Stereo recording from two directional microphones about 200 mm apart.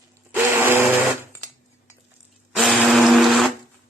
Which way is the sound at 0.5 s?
10° right (ahead or behind).